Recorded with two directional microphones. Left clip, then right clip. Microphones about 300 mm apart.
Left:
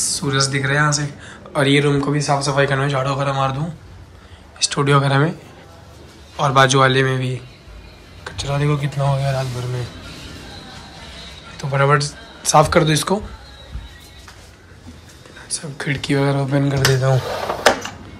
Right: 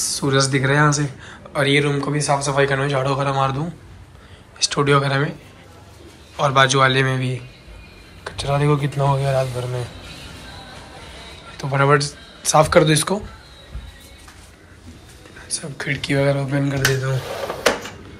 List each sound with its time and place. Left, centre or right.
0.0 s speech: centre
6.3 s speech: centre
11.5 s speech: centre
15.4 s speech: centre